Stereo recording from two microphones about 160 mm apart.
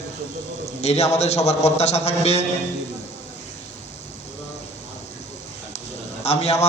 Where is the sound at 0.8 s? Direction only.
45° left (ahead or behind).